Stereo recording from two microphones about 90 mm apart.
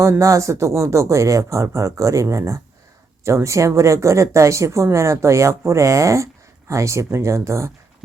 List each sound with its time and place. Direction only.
0.0 s speech: 35° right (ahead or behind)